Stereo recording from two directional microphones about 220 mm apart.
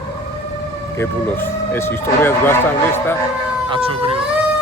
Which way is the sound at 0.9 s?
10° left (ahead or behind).